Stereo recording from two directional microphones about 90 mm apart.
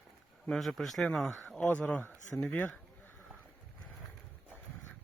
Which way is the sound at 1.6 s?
15° left (ahead or behind).